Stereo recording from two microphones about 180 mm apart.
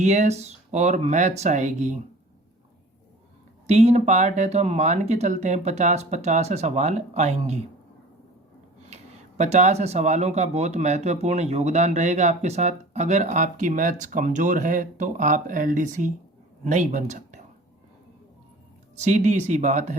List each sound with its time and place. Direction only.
0.0 s speech: 40° right (ahead or behind)
3.7 s speech: 35° right (ahead or behind)
9.4 s speech: 40° right (ahead or behind)
18.9 s speech: 40° right (ahead or behind)